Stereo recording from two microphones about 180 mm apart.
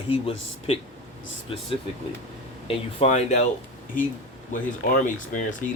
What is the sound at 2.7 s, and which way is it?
Speech, 35° left (ahead or behind).